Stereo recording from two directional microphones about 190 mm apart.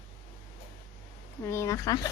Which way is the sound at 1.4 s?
15° left (ahead or behind).